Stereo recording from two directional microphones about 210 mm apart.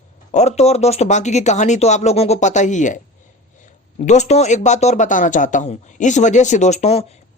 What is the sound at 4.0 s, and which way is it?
Speech, 35° left (ahead or behind).